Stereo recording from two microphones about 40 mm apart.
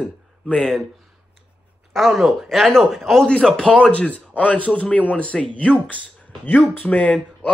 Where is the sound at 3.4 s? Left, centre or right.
Centre.